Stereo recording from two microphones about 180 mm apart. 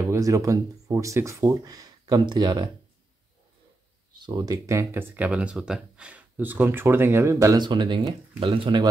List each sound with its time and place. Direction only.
0.0 s speech: 20° right (ahead or behind)
4.3 s speech: 20° right (ahead or behind)